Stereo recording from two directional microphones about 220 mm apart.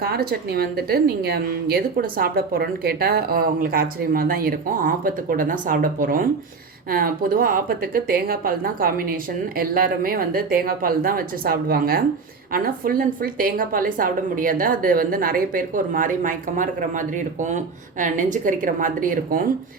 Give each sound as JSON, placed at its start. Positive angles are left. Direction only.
{"t": 0.0, "sound": "a woman's voice", "side_deg": -45}